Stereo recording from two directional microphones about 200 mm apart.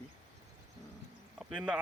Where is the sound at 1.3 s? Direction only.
5° right (ahead or behind).